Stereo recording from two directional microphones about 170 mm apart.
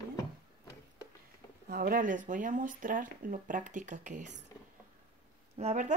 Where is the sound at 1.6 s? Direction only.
55° right (ahead or behind).